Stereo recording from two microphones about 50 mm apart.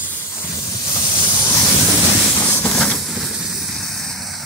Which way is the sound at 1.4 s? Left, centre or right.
Left.